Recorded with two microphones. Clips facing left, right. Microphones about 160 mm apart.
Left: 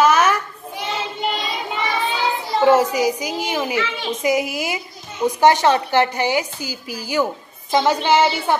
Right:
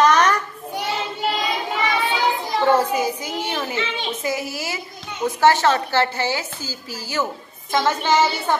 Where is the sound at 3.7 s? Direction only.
20° right (ahead or behind).